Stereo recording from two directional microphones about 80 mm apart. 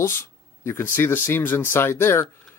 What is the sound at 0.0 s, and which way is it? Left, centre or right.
Speech, left.